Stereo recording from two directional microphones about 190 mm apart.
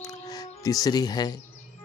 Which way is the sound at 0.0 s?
20° left (ahead or behind).